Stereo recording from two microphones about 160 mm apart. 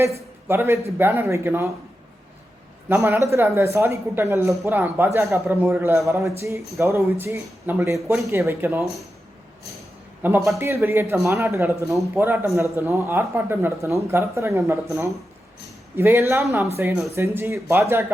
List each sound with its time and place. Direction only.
0.4 s speech: 15° right (ahead or behind)
2.9 s speech: 15° right (ahead or behind)
10.2 s speech: 15° right (ahead or behind)